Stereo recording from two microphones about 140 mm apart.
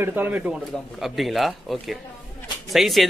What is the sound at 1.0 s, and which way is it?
Speech, centre (ahead or behind).